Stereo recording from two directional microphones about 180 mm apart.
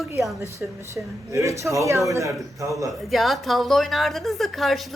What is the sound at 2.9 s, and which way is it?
A woman's voice, centre (ahead or behind).